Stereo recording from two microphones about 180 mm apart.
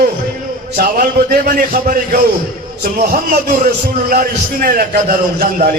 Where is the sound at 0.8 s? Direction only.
50° right (ahead or behind).